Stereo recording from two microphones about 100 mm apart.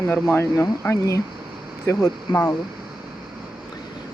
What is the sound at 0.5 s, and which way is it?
Speech, 35° left (ahead or behind).